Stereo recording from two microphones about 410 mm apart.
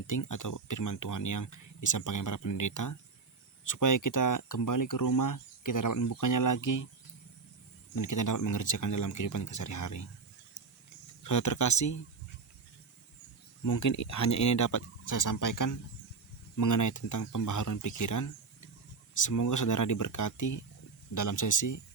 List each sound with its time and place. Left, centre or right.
0.1 s speech: left
7.9 s speech: left
11.2 s speech: left
13.7 s speech: left